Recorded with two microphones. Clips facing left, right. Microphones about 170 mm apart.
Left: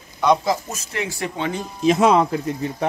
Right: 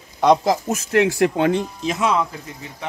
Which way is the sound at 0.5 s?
65° right (ahead or behind).